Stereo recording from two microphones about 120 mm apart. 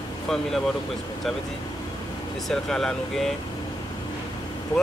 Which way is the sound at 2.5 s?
5° left (ahead or behind).